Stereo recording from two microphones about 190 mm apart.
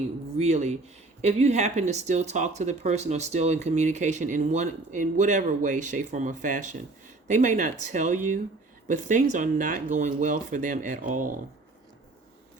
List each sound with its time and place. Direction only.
0.3 s speech: 35° right (ahead or behind)